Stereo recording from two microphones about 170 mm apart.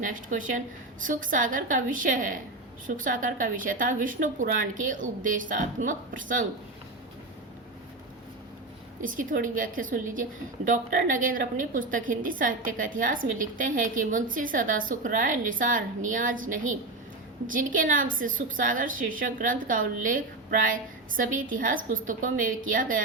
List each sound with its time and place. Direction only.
0.0 s a woman's voice: 50° right (ahead or behind)
9.0 s a woman's voice: 50° right (ahead or behind)